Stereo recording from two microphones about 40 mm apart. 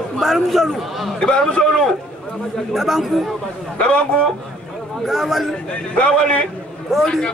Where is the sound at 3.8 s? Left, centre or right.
Left.